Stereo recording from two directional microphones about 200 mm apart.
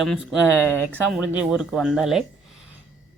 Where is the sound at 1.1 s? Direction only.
5° right (ahead or behind).